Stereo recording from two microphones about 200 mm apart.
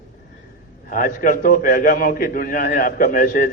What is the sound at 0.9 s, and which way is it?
A man's voice, 45° left (ahead or behind).